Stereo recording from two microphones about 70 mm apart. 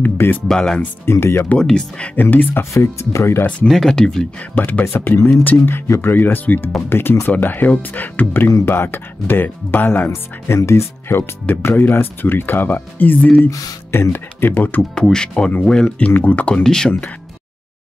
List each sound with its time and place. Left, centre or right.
0.0 s speech: left
0.5 s speech: centre
1.2 s speech: left
1.5 s speech: centre
2.7 s speech: left
3.6 s speech: centre
4.4 s speech: left
4.8 s speech: left
10.0 s speech: left
13.5 s speech: left
14.1 s speech: left
14.8 s speech: centre
16.1 s speech: left
16.6 s speech: centre